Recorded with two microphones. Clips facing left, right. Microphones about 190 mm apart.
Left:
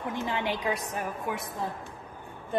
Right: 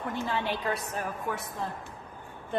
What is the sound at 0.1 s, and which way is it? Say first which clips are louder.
A woman's voice: left 1 dB; 15° left (ahead or behind).